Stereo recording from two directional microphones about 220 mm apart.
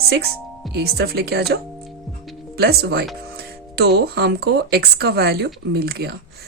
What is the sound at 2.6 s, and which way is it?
Speech, 45° right (ahead or behind).